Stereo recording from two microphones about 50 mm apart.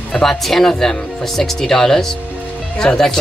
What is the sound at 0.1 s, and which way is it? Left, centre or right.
Speech, centre.